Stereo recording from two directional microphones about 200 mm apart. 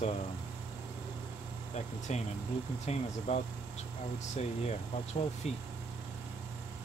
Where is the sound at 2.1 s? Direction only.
35° left (ahead or behind).